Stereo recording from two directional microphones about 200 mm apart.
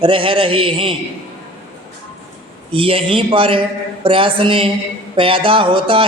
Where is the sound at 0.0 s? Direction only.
25° right (ahead or behind).